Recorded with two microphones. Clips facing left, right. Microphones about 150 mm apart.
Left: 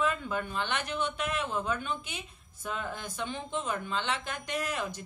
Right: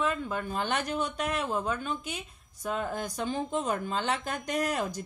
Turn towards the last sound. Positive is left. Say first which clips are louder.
# right 4 dB
turn(degrees=-40)  # may be behind; listen again after turning